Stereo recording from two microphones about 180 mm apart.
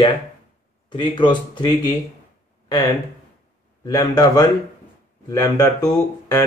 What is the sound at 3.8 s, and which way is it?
Speech, 20° left (ahead or behind).